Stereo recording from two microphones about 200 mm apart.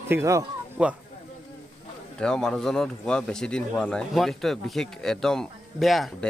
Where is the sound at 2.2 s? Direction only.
5° left (ahead or behind).